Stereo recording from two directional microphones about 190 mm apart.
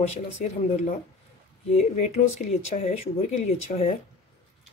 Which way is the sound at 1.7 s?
35° left (ahead or behind).